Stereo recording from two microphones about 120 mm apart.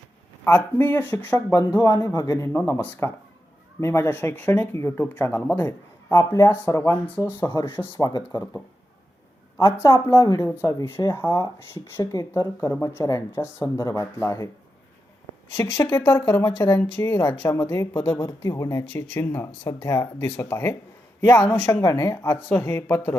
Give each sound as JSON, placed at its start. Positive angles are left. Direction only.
{"t": 0.4, "sound": "speech", "side_deg": 15}
{"t": 7.3, "sound": "speech", "side_deg": 40}
{"t": 9.6, "sound": "speech", "side_deg": 25}
{"t": 15.5, "sound": "speech", "side_deg": 20}